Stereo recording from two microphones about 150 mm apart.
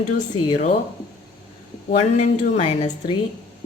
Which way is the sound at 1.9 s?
45° left (ahead or behind).